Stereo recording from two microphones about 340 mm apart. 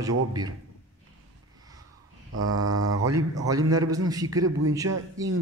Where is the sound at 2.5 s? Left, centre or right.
Centre.